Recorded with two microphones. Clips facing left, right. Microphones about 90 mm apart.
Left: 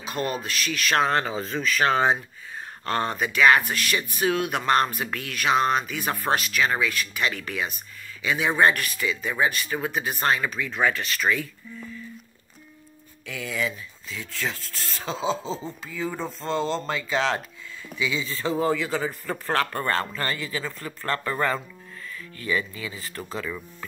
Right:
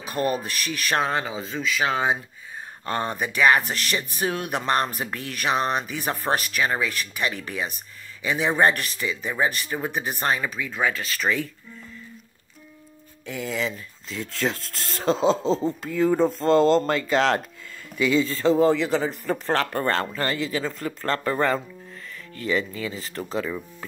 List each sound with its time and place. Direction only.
0.1 s speech: 25° right (ahead or behind)
13.3 s speech: 30° right (ahead or behind)
15.0 s speech: 5° left (ahead or behind)
16.3 s speech: 50° right (ahead or behind)
18.4 s speech: 30° right (ahead or behind)
23.2 s speech: 30° right (ahead or behind)